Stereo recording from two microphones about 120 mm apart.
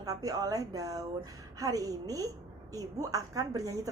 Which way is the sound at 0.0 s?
30° right (ahead or behind).